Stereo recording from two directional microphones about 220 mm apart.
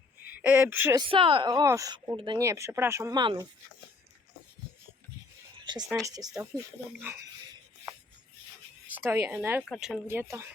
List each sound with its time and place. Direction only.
0.3 s speech: 5° right (ahead or behind)
1.1 s speech: 25° right (ahead or behind)
5.5 s a sound: 20° right (ahead or behind)
6.1 s speech: 15° right (ahead or behind)
8.9 s speech: 10° right (ahead or behind)